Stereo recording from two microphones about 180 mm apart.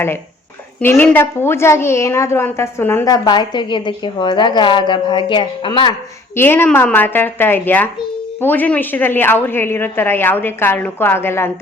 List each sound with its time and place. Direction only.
0.8 s a woman's voice: 10° left (ahead or behind); by 5.9 s 30° left (ahead or behind)
6.3 s a woman's voice: 10° left (ahead or behind)